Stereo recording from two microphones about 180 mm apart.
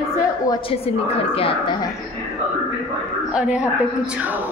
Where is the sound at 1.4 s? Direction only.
30° left (ahead or behind).